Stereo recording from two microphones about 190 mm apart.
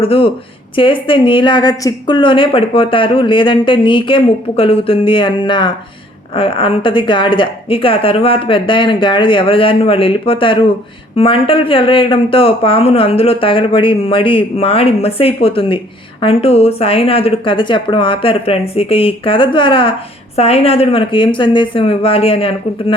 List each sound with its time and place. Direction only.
0.0 s a woman's voice: 30° left (ahead or behind)